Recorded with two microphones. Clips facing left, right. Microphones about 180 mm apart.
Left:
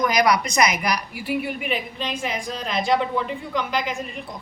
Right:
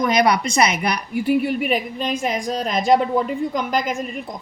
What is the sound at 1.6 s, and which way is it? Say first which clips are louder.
A woman's voice: right 5 dB; 40° right (ahead or behind).